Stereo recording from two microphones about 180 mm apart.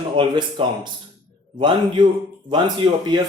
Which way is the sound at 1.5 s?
25° right (ahead or behind).